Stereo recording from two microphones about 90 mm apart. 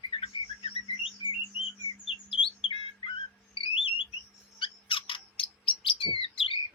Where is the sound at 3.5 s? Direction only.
75° left (ahead or behind).